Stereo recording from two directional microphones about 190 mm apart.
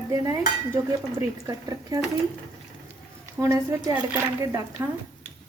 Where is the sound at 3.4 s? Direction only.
15° right (ahead or behind).